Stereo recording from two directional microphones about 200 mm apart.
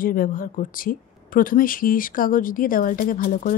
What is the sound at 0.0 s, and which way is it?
Speech, 45° left (ahead or behind).